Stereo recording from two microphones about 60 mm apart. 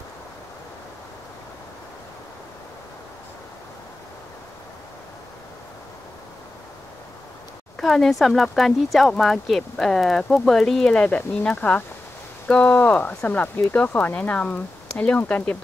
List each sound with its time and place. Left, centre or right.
7.7 s speech: centre
10.9 s speech: left